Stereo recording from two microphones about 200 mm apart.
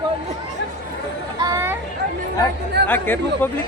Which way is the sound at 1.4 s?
15° right (ahead or behind).